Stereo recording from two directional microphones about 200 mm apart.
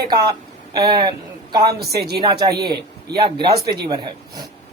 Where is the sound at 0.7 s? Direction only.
20° right (ahead or behind).